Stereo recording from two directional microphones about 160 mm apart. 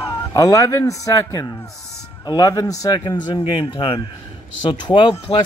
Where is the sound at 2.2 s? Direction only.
25° left (ahead or behind).